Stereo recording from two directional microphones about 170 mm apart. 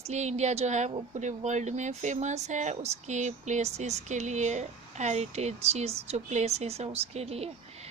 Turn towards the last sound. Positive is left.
turn(degrees=-35)  # may be behind; listen again after turning